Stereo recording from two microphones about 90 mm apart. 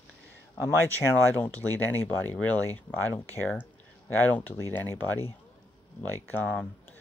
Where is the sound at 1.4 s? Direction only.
20° left (ahead or behind).